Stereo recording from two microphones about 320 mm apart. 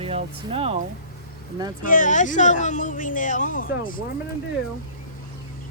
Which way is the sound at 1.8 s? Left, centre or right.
Left.